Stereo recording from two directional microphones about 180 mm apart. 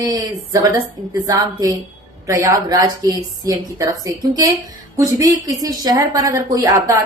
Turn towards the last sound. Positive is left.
turn(degrees=-20)  # may be behind; listen again after turning